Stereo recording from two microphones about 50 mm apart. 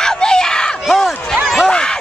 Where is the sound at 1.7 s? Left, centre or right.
Centre.